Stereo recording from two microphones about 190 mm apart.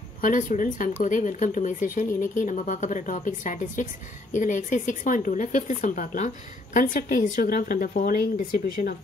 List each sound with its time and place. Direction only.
0.2 s speech: 45° left (ahead or behind)